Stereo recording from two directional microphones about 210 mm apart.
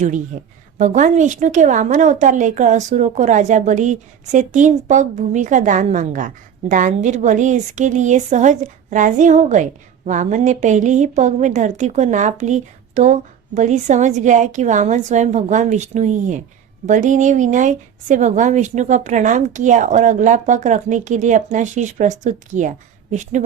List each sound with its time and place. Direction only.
0.3 s speech: 35° right (ahead or behind)